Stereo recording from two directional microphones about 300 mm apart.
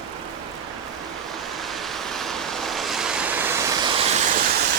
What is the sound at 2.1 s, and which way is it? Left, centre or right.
Vehicle, centre.